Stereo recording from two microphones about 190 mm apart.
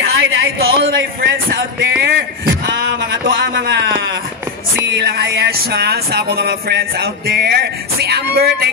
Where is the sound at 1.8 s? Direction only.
65° right (ahead or behind).